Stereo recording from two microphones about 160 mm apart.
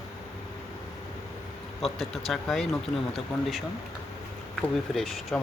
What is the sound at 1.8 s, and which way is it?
Speech, centre (ahead or behind).